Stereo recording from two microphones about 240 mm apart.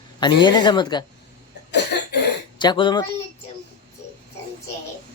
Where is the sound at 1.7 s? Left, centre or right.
Left.